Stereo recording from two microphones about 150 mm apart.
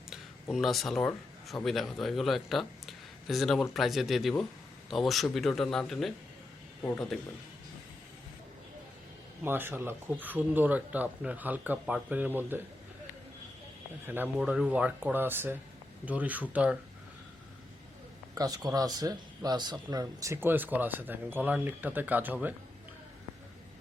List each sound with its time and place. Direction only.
0.5 s speech: centre (ahead or behind)
9.4 s speech: 15° right (ahead or behind)
14.3 s speech: 5° right (ahead or behind)
18.3 s speech: 25° right (ahead or behind)